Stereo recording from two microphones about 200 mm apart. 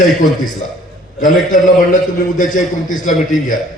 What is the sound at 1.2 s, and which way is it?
A man's voice, 40° left (ahead or behind).